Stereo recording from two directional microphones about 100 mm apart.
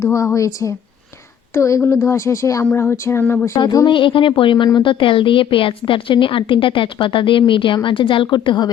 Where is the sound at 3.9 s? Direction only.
60° left (ahead or behind).